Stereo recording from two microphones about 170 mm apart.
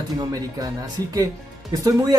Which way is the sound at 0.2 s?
20° right (ahead or behind).